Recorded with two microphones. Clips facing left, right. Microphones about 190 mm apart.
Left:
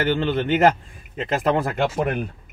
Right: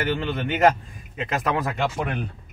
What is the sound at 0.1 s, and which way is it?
A man's voice, 30° left (ahead or behind).